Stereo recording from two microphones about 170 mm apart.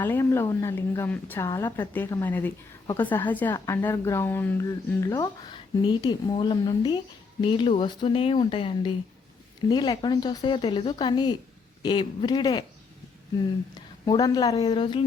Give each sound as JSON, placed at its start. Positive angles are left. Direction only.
{"t": 0.0, "sound": "a woman's voice", "side_deg": 15}
{"t": 13.7, "sound": "a woman's voice", "side_deg": 25}